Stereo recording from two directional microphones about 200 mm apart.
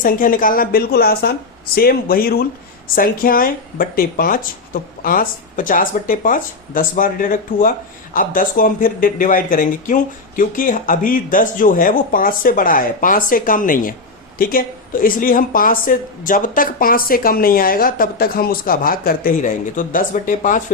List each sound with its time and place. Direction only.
0.0 s speech: 45° left (ahead or behind)